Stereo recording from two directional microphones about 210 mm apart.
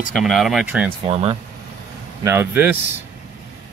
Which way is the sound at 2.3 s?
10° right (ahead or behind).